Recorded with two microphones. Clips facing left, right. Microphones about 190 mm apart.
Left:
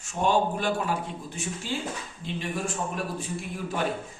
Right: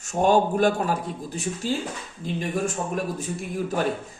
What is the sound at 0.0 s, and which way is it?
Speech, 45° right (ahead or behind).